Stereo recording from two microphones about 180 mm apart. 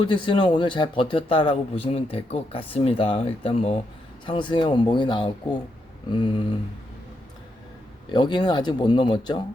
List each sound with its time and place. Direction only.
0.0 s a man's voice: 30° left (ahead or behind)
8.1 s a man's voice: 25° left (ahead or behind)